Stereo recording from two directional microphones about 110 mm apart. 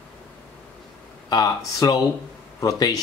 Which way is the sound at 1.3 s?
35° left (ahead or behind).